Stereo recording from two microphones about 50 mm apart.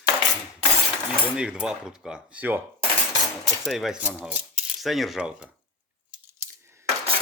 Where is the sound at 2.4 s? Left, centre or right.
Right.